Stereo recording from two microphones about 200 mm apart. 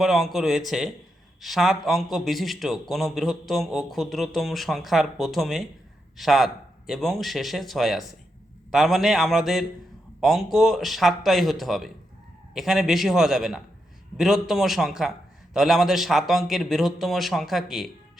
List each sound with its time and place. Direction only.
0.0 s a man's voice: centre (ahead or behind)